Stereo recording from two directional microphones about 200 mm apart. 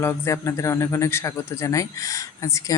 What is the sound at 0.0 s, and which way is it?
Speech, 15° left (ahead or behind).